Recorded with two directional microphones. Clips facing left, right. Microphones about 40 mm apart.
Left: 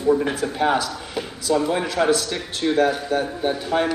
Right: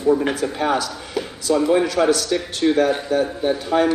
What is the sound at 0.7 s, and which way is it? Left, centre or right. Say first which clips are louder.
Speech: right 1 dB; left.